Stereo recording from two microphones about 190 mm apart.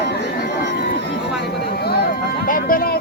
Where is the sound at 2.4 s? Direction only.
45° left (ahead or behind).